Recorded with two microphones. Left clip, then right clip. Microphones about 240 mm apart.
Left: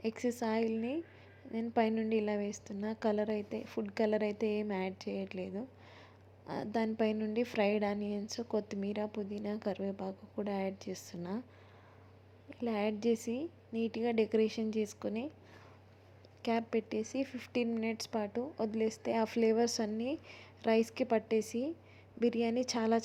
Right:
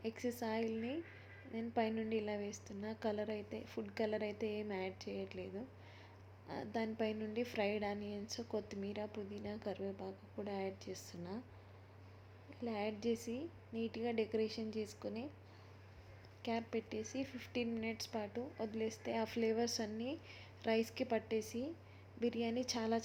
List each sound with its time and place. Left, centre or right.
0.0 s speech: centre
12.5 s a woman's voice: centre
16.4 s speech: centre